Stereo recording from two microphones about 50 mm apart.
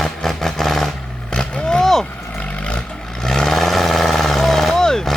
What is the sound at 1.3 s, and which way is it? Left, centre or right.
Vehicle, centre.